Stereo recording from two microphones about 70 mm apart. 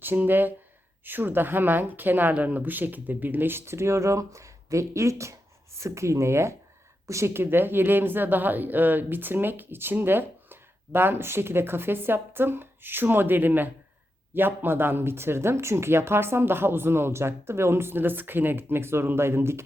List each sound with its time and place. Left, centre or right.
0.0 s a woman's voice: right